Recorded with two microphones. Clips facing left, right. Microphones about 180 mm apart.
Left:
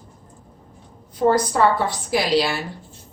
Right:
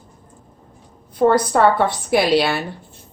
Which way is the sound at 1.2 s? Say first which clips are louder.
Right 3 dB; 60° right (ahead or behind).